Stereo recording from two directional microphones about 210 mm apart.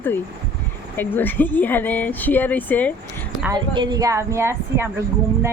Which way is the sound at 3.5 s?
20° right (ahead or behind).